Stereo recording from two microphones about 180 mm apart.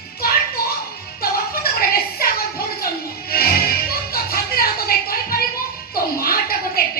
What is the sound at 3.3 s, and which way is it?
Music, 60° left (ahead or behind).